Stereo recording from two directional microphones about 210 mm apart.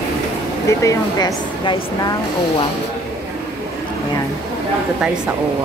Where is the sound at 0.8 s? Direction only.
15° left (ahead or behind).